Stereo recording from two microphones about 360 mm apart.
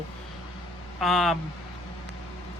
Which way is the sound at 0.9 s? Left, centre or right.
Centre.